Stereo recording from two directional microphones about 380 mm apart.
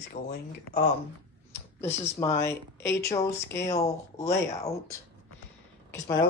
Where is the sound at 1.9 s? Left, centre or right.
Centre.